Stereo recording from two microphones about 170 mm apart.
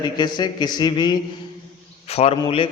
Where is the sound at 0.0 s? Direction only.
25° left (ahead or behind).